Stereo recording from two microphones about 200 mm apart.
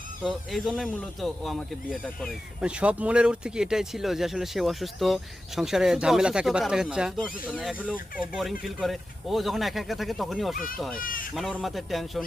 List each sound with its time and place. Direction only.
0.2 s speech: centre (ahead or behind)
11.0 s a sound: 45° left (ahead or behind)
11.3 s speech: centre (ahead or behind)